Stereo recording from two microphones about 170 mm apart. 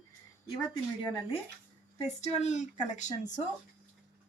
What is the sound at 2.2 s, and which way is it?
Speech, 40° left (ahead or behind).